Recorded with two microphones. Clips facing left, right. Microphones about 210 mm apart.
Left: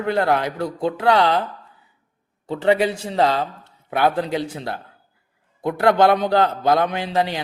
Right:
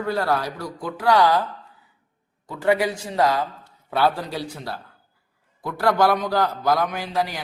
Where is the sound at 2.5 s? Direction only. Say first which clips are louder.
Left 3 dB; 25° left (ahead or behind).